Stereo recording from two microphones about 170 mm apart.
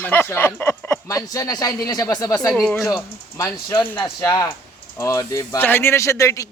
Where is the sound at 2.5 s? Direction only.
5° left (ahead or behind).